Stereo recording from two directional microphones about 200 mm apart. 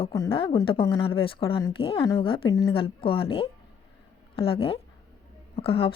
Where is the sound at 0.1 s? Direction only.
20° left (ahead or behind).